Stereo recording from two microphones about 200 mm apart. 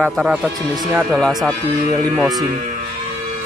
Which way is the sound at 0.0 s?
5° right (ahead or behind).